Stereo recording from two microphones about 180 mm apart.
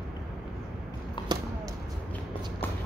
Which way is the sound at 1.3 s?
25° right (ahead or behind).